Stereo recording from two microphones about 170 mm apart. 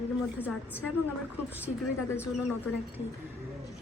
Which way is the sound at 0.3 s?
10° right (ahead or behind).